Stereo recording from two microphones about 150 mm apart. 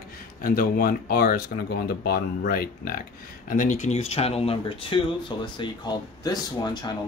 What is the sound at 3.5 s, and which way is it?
Speech, 55° left (ahead or behind).